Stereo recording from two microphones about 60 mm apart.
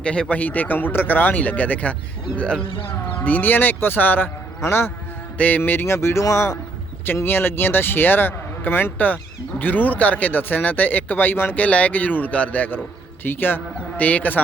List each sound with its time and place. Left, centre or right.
0.0 s speech: centre
2.4 s speech: centre
3.2 s speech: left
4.6 s speech: left
5.4 s speech: left
7.3 s speech: left